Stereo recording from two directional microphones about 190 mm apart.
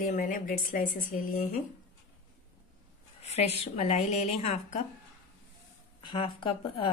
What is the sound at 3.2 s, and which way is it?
Speech, 35° left (ahead or behind).